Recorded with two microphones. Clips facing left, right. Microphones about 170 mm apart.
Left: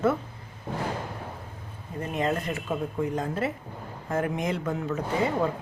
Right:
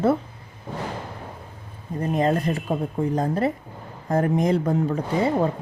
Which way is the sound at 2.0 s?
35° right (ahead or behind).